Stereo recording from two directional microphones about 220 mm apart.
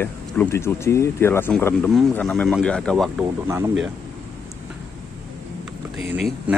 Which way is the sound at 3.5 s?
10° right (ahead or behind).